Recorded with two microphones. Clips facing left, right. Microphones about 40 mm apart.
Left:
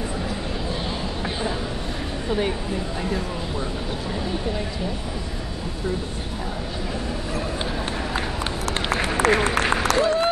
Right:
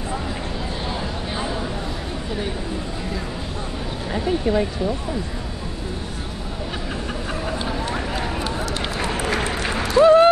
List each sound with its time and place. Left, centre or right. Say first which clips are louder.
4.1 s speech: right 9 dB; right
8.9 s run: left 4 dB; left
9.3 s applause: left 3 dB; left
9.9 s speech: right 13 dB; right